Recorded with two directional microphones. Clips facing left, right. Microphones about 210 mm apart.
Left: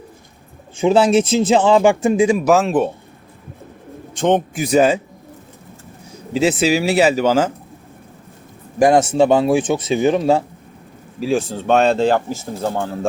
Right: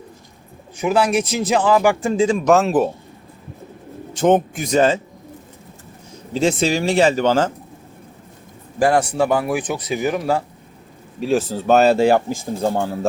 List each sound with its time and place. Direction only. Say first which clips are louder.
0.8 s speech: left 4 dB; 25° left (ahead or behind); by 2.9 s centre (ahead or behind)
4.1 s a man's voice: right 1 dB; 5° right (ahead or behind)
4.6 s speech: left 6 dB; 10° left (ahead or behind)
6.3 s speech: left 2 dB; 5° left (ahead or behind)
8.8 s speech: left 4 dB; 20° left (ahead or behind)
11.2 s speech: even; centre (ahead or behind)